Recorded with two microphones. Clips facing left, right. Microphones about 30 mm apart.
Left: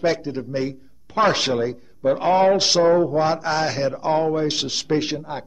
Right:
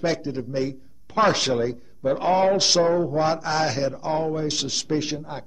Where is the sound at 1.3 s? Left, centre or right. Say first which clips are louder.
Left 1 dB; centre.